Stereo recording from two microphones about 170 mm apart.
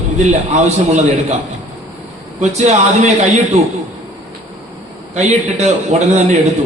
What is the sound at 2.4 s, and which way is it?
Speech, 40° right (ahead or behind).